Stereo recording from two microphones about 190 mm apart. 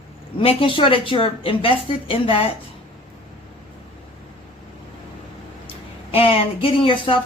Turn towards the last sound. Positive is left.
turn(degrees=25)  # may be behind; listen again after turning